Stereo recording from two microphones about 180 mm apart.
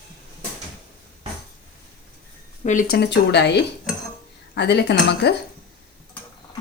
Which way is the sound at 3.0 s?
70° left (ahead or behind).